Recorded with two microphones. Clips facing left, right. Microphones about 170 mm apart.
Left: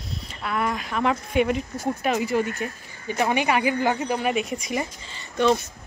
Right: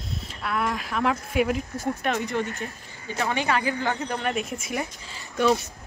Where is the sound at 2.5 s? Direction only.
15° left (ahead or behind).